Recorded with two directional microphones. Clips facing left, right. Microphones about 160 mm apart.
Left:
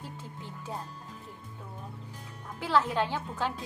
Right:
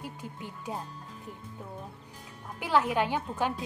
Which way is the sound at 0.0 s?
15° right (ahead or behind).